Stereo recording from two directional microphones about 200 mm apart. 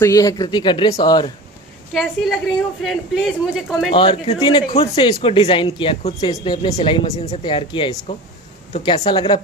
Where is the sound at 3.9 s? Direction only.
25° left (ahead or behind).